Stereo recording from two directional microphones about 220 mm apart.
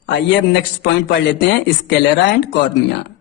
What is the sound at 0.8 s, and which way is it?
A man's voice, 55° left (ahead or behind).